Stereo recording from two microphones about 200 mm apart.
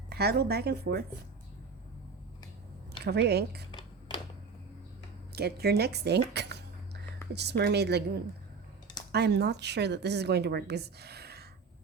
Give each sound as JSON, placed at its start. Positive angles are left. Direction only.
{"t": 0.1, "sound": "a woman's voice", "side_deg": -55}
{"t": 3.0, "sound": "a woman's voice", "side_deg": -55}
{"t": 3.7, "sound": "a sound", "side_deg": 20}
{"t": 5.3, "sound": "speech", "side_deg": -55}